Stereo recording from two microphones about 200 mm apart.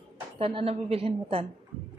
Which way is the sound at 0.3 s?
30° right (ahead or behind).